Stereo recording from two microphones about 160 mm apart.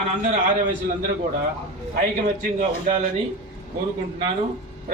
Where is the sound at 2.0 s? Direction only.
60° right (ahead or behind).